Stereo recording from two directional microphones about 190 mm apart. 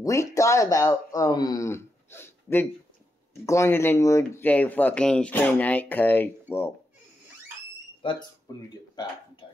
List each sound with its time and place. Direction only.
0.0 s speech: 15° left (ahead or behind)
8.0 s speech: 25° left (ahead or behind)
9.4 s music: 25° left (ahead or behind)